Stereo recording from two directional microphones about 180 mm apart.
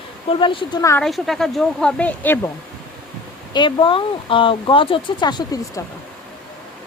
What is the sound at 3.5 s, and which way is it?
Speech, 25° left (ahead or behind).